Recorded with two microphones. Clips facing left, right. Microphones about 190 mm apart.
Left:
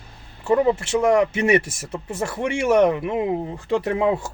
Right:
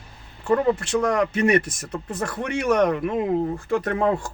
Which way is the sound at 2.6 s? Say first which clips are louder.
Left 3 dB; 25° left (ahead or behind).